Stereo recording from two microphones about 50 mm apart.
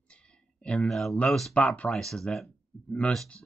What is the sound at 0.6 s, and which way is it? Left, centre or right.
Speech, left.